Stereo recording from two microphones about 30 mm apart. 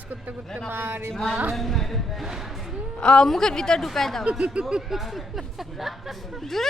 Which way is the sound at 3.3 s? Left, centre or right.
Centre.